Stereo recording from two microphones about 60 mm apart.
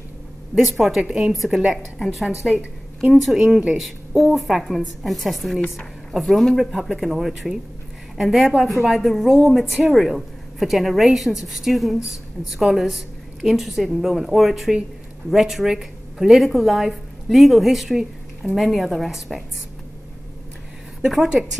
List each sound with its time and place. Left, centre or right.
0.6 s a woman's voice: centre
1.0 s a woman's voice: centre
1.3 s a woman's voice: centre